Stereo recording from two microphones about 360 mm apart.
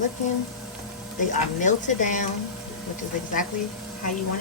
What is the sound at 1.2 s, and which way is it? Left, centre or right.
A woman's voice, left.